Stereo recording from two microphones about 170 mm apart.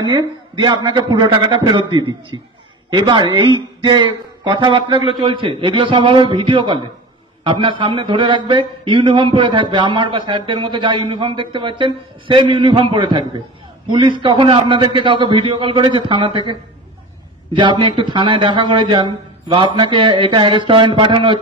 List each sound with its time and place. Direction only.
0.1 s a man's voice: 25° right (ahead or behind)
17.6 s a man's voice: 30° right (ahead or behind)